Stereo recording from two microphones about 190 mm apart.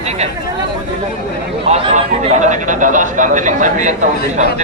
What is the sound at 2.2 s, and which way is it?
Speech, 40° right (ahead or behind).